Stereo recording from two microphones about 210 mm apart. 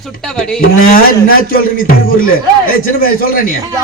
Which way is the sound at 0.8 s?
45° left (ahead or behind).